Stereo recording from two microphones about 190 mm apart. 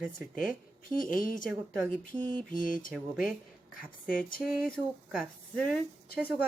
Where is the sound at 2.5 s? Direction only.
45° left (ahead or behind).